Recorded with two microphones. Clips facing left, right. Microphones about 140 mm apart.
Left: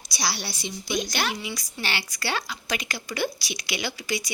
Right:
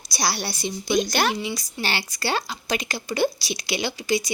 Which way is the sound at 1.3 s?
30° right (ahead or behind).